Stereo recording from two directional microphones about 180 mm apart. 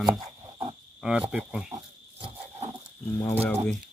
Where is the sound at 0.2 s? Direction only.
25° right (ahead or behind).